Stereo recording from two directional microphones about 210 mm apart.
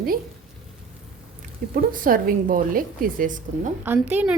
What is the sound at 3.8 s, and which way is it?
Speech, 10° right (ahead or behind).